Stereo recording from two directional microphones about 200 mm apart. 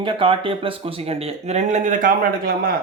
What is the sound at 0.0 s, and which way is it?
Speech, 25° right (ahead or behind).